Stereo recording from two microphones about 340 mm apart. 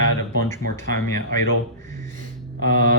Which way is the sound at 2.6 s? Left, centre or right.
Left.